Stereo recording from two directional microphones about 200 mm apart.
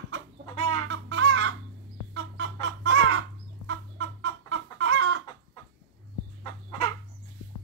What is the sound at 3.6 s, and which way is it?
Chicken, 75° right (ahead or behind).